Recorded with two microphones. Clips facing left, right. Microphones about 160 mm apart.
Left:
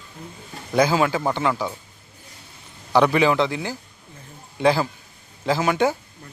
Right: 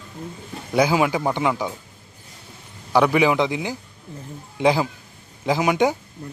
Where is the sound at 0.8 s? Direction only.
15° right (ahead or behind).